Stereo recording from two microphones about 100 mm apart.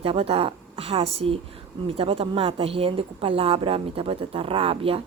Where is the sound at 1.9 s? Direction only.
65° right (ahead or behind).